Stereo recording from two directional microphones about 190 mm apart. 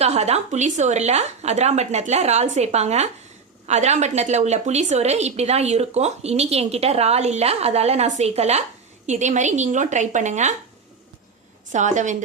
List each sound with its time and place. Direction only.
0.0 s a woman's voice: 35° right (ahead or behind)
11.7 s a woman's voice: 40° right (ahead or behind)